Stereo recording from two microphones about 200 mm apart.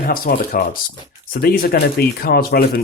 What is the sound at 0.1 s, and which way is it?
Speech, 45° left (ahead or behind).